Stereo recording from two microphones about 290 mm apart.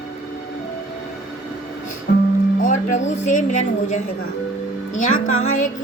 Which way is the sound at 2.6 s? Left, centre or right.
Left.